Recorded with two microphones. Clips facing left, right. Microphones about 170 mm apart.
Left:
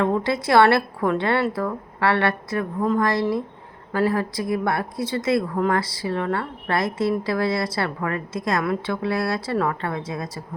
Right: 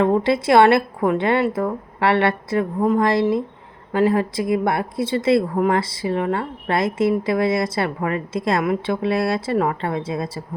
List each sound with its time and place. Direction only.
0.0 s speech: 20° right (ahead or behind)